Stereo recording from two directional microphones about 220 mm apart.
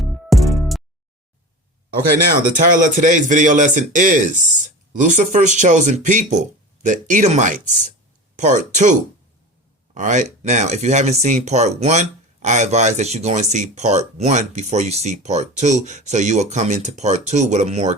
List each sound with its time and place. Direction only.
0.0 s music: centre (ahead or behind)
2.5 s speech: 35° right (ahead or behind)